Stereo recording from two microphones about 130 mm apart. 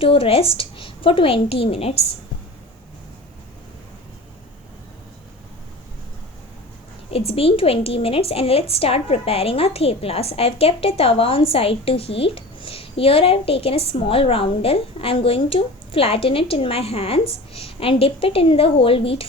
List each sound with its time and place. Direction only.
0.0 s a woman's voice: 45° left (ahead or behind)
7.1 s a woman's voice: 50° left (ahead or behind)